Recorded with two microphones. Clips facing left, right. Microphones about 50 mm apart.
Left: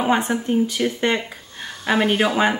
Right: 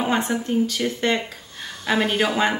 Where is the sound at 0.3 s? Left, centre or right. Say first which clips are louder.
Left 2 dB; centre.